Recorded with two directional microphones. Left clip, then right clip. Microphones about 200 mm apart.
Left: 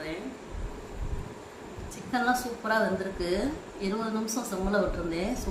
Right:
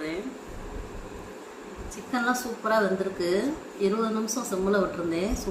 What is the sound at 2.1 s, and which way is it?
A woman's voice, centre (ahead or behind).